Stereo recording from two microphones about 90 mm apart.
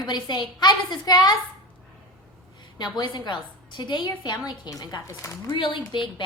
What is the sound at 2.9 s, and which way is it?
A woman's voice, 55° left (ahead or behind).